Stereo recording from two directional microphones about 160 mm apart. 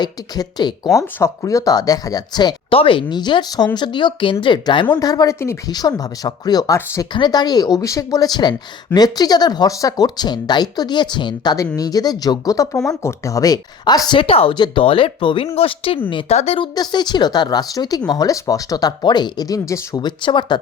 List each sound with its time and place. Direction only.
0.0 s speech: 25° left (ahead or behind)
16.7 s speech: 25° left (ahead or behind)